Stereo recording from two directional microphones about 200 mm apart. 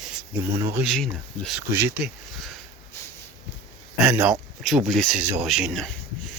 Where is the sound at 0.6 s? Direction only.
15° right (ahead or behind).